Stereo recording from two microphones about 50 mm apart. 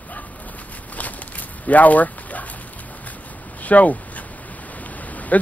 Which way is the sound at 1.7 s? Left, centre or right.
Left.